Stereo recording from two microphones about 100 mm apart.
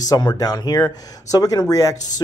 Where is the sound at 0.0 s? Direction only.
40° left (ahead or behind).